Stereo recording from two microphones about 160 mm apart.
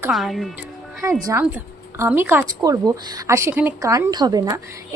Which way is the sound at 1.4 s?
15° right (ahead or behind).